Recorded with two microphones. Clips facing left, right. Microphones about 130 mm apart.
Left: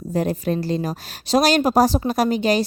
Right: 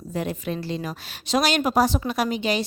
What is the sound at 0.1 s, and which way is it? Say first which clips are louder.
A woman's voice: left 6 dB; 40° left (ahead or behind).